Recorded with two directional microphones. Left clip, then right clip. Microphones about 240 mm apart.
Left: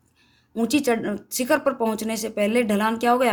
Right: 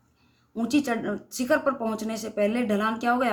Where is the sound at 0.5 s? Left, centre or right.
Left.